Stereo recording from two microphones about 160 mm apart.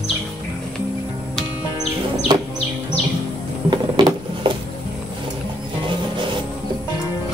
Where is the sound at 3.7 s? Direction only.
30° right (ahead or behind).